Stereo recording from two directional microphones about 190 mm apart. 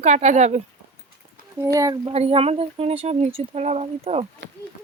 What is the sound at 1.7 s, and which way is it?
Speech, 20° right (ahead or behind).